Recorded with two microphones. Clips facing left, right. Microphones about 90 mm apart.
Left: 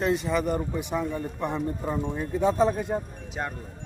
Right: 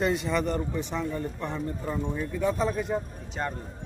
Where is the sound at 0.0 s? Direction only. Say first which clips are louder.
Left 1 dB; centre (ahead or behind); by 2.1 s 15° left (ahead or behind).